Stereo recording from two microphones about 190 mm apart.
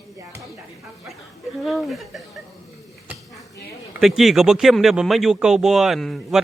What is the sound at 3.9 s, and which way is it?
Speech, centre (ahead or behind).